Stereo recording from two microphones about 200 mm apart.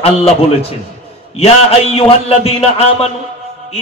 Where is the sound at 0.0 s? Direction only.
30° left (ahead or behind).